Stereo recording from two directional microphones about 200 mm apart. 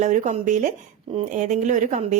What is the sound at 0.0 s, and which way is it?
A woman's voice, 40° right (ahead or behind).